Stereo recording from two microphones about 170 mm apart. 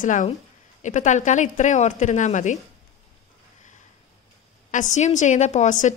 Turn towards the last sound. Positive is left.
turn(degrees=45)  # may be behind; listen again after turning